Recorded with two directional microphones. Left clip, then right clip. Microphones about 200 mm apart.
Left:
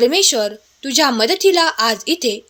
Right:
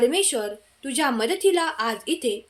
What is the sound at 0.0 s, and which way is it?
A woman's voice, 45° left (ahead or behind).